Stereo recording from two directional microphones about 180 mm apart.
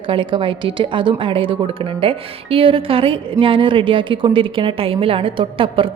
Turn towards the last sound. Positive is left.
turn(degrees=-30)  # may be behind; listen again after turning